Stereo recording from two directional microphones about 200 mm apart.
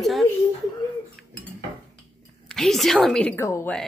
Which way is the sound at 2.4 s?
Centre (ahead or behind).